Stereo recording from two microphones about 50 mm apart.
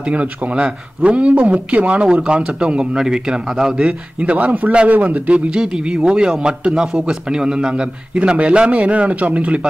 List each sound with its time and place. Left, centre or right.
0.0 s a man's voice: right; by 3.9 s centre
4.2 s a man's voice: right
5.5 s a man's voice: centre